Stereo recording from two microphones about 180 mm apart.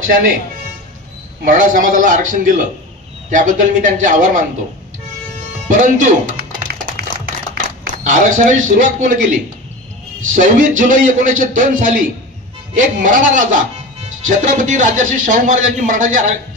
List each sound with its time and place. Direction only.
1.4 s speech: 45° right (ahead or behind)
5.7 s music: 45° right (ahead or behind)
8.0 s speech: 45° right (ahead or behind)